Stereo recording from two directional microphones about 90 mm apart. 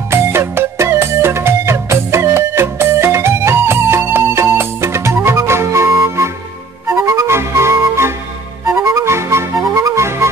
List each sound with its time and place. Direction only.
0.1 s music: 30° right (ahead or behind)